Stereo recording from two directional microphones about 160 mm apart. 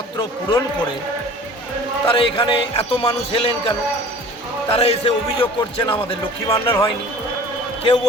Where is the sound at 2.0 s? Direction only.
30° left (ahead or behind).